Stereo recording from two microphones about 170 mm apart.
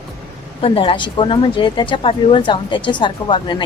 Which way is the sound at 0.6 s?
30° left (ahead or behind).